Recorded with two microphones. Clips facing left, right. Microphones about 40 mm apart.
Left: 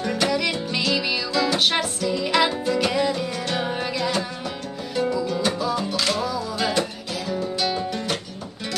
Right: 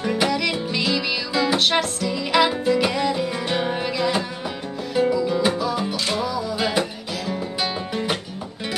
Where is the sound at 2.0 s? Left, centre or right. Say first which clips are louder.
Even; centre.